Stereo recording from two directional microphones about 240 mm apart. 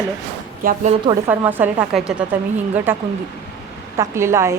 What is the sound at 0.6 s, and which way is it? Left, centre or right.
Speech, right.